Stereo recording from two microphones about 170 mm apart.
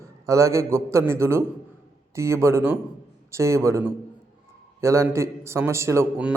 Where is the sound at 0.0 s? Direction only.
15° right (ahead or behind).